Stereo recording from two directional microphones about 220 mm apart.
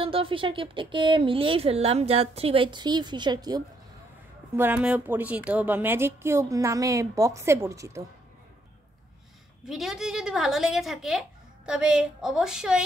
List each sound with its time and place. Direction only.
0.0 s speech: 25° right (ahead or behind)
4.6 s a woman's voice: 5° right (ahead or behind)
9.7 s a woman's voice: centre (ahead or behind)